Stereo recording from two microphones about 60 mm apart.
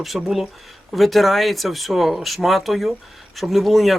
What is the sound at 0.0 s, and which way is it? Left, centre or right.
Speech, centre.